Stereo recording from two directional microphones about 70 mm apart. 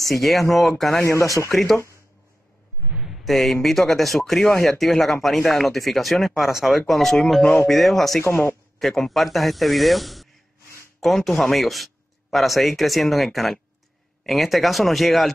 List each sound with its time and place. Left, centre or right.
0.0 s speech: centre
1.0 s speech: left
1.5 s speech: centre
2.9 s a sound: centre
3.3 s a man's voice: centre
8.2 s speech: left
8.7 s speech: centre